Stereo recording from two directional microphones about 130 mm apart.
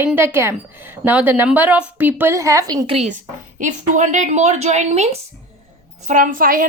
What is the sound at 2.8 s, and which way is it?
Speech, 50° right (ahead or behind).